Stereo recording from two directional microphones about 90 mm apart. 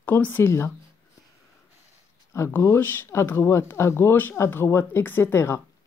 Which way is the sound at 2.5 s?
25° left (ahead or behind).